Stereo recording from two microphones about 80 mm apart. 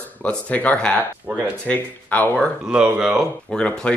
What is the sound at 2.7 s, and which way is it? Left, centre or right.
Speech, centre.